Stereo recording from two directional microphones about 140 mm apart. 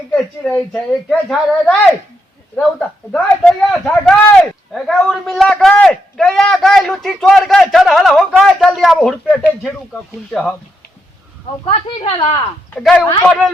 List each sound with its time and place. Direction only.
0.4 s speech: 10° left (ahead or behind)
11.6 s speech: 45° left (ahead or behind)
12.1 s speech: 30° left (ahead or behind)
12.7 s speech: 10° left (ahead or behind)